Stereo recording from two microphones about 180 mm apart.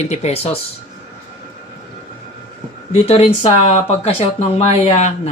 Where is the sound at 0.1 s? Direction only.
35° left (ahead or behind).